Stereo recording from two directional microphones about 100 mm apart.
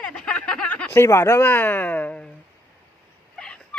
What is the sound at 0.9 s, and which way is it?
Speech, 25° left (ahead or behind).